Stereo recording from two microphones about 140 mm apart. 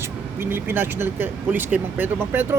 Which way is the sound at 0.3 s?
15° right (ahead or behind).